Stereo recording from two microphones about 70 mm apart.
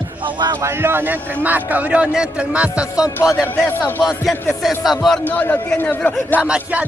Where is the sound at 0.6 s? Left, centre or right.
Right; by 3.1 s centre.